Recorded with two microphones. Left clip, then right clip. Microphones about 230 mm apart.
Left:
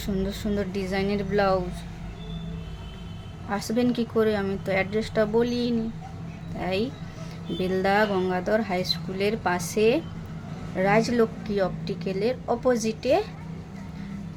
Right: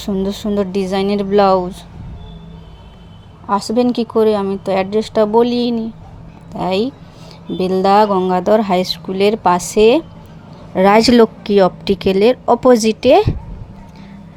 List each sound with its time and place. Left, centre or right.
0.0 s a woman's voice: right
3.5 s a woman's voice: right